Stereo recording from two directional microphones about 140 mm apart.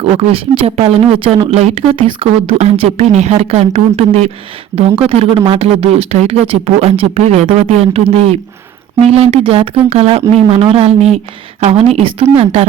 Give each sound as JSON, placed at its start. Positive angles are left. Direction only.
{"t": 0.0, "sound": "speech", "side_deg": -45}